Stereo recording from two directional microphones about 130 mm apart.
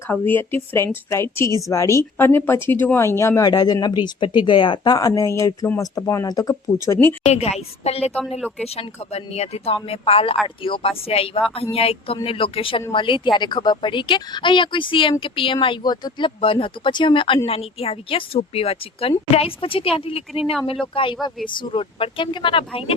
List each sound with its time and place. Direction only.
0.1 s a woman's voice: 15° left (ahead or behind)
7.3 s a woman's voice: 55° left (ahead or behind)